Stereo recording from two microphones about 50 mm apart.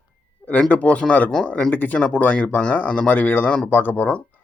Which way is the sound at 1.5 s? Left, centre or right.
Centre.